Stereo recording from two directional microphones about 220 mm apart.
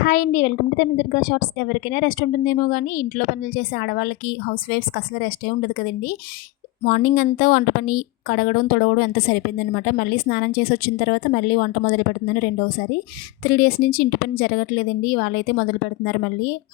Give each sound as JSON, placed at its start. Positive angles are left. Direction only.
{"t": 0.0, "sound": "a woman's voice", "side_deg": 40}